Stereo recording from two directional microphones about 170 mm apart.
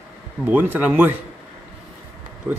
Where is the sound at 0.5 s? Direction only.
10° right (ahead or behind).